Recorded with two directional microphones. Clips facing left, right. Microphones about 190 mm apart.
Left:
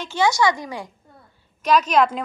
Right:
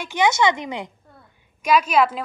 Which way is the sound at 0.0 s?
15° right (ahead or behind).